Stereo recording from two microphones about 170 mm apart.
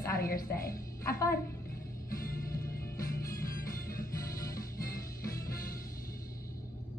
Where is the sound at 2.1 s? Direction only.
60° left (ahead or behind).